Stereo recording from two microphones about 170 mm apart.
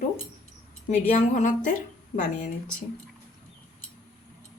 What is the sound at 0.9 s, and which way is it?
Speech, 45° left (ahead or behind).